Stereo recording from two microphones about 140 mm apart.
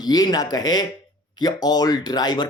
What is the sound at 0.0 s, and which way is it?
Speech, 30° left (ahead or behind).